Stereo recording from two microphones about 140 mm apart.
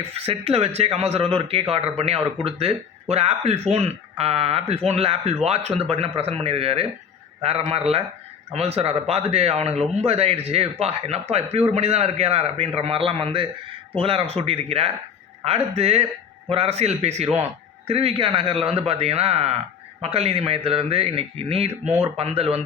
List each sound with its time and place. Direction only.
0.0 s speech: 45° right (ahead or behind)